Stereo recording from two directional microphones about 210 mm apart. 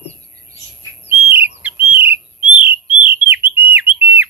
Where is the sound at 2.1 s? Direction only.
25° left (ahead or behind).